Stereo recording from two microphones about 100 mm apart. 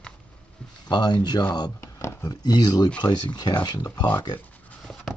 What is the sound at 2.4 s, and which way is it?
Speech, 40° left (ahead or behind).